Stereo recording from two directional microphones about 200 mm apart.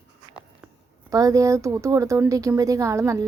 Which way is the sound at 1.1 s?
15° right (ahead or behind).